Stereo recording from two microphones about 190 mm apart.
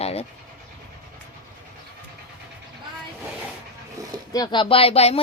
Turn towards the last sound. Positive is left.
turn(degrees=30)  # may be behind; listen again after turning